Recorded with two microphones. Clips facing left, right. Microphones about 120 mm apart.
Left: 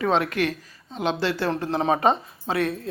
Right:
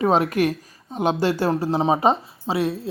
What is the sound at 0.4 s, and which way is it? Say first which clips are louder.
Speech: right 4 dB; 45° right (ahead or behind).